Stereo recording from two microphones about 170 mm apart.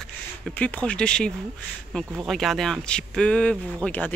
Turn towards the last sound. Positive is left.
turn(degrees=10)  # may be behind; listen again after turning